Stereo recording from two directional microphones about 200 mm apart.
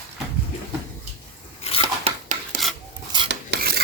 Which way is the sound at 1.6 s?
30° left (ahead or behind).